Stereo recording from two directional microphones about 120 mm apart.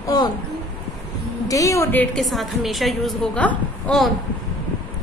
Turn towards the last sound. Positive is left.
turn(degrees=10)  # may be behind; listen again after turning